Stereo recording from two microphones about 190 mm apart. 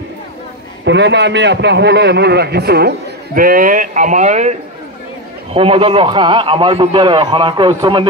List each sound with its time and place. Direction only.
0.8 s a man's voice: 65° right (ahead or behind); by 8.1 s 25° right (ahead or behind)